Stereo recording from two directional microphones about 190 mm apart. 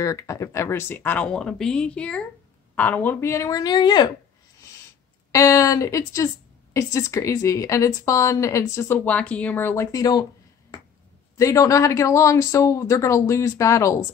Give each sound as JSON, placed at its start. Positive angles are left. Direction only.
{"t": 0.0, "sound": "a woman's voice", "side_deg": 15}
{"t": 5.3, "sound": "a woman's voice", "side_deg": 15}
{"t": 11.3, "sound": "a woman's voice", "side_deg": 15}